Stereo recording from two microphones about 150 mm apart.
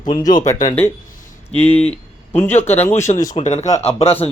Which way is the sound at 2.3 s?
15° left (ahead or behind).